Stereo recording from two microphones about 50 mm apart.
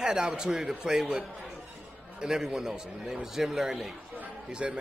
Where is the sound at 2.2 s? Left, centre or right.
Centre.